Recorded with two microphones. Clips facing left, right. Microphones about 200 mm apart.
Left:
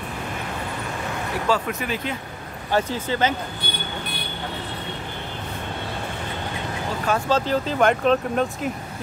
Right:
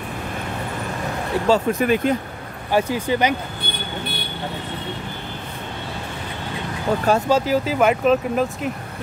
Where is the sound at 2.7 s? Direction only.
10° right (ahead or behind).